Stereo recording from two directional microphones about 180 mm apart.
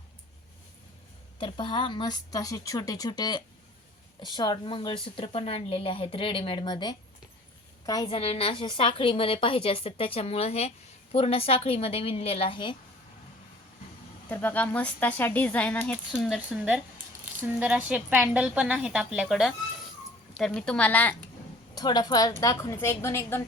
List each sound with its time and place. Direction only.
1.4 s a woman's voice: 25° left (ahead or behind)
14.3 s speech: 10° left (ahead or behind)
16.2 s a woman's voice: centre (ahead or behind)
20.6 s speech: 5° left (ahead or behind)
21.8 s speech: 20° left (ahead or behind)